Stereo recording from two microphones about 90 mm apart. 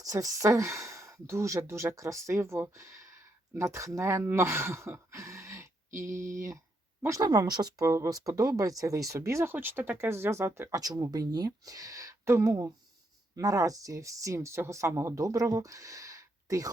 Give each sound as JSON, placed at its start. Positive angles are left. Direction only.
{"t": 0.0, "sound": "a woman's voice", "side_deg": -40}
{"t": 7.3, "sound": "speech", "side_deg": -50}
{"t": 7.9, "sound": "speech", "side_deg": -35}
{"t": 10.7, "sound": "speech", "side_deg": -40}